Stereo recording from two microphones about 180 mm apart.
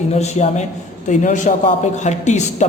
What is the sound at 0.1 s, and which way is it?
Speech, 40° left (ahead or behind).